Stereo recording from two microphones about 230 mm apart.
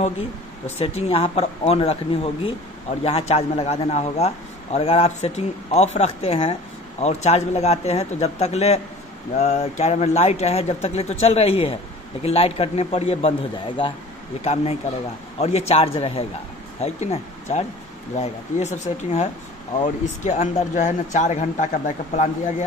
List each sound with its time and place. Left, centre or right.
0.7 s speech: left